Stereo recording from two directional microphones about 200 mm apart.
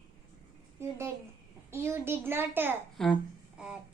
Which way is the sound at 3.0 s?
Centre (ahead or behind).